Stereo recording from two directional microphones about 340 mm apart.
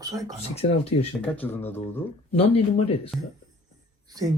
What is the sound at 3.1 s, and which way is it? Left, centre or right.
Speech, centre.